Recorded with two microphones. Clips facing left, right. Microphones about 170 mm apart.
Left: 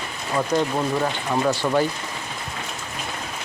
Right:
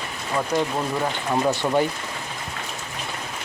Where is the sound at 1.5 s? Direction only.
20° right (ahead or behind).